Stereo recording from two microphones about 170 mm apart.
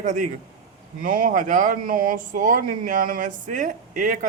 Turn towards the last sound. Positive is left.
turn(degrees=-50)  # may be behind; listen again after turning